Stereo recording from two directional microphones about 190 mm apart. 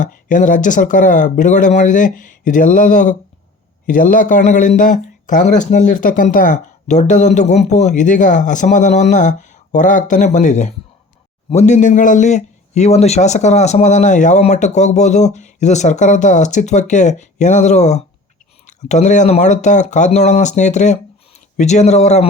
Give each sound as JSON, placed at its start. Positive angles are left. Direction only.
{"t": 0.0, "sound": "a man's voice", "side_deg": 45}